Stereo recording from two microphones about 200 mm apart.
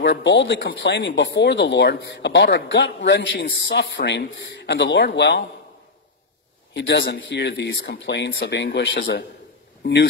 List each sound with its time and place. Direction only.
0.0 s speech: 65° left (ahead or behind)
6.7 s speech: 65° left (ahead or behind)